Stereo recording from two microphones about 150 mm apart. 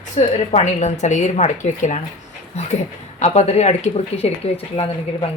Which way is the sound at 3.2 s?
50° left (ahead or behind).